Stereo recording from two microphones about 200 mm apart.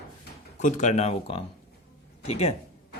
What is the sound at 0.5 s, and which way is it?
Speech, 35° left (ahead or behind).